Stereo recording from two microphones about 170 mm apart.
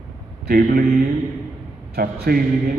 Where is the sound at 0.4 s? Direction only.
65° right (ahead or behind).